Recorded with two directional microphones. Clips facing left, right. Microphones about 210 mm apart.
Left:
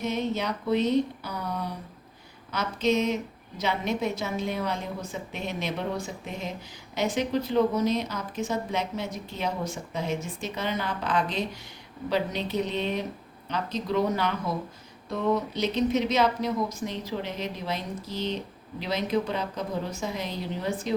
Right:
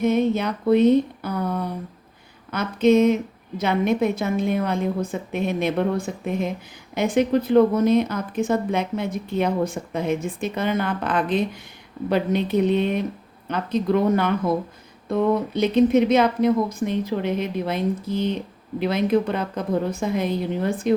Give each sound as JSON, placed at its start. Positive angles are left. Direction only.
{"t": 0.0, "sound": "a woman's voice", "side_deg": -55}